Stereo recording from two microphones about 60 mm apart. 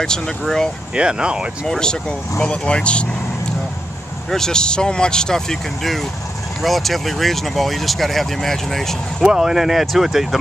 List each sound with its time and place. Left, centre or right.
0.0 s speech: centre
0.9 s speech: centre
1.7 s speech: centre
4.3 s speech: centre
9.2 s speech: centre